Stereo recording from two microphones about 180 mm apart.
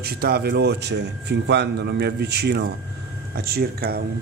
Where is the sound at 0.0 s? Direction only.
60° right (ahead or behind).